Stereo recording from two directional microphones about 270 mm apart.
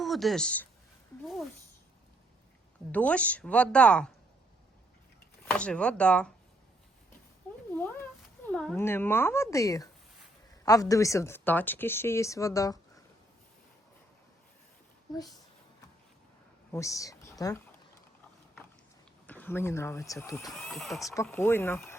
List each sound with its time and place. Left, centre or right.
0.0 s speech: centre
2.9 s a woman's voice: centre
5.5 s a woman's voice: centre
8.4 s a woman's voice: centre
16.7 s a woman's voice: centre
19.3 s a woman's voice: centre